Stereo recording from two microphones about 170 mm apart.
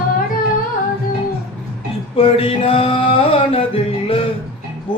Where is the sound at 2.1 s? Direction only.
35° left (ahead or behind).